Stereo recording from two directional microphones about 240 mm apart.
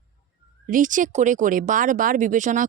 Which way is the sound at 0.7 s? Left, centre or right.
Right.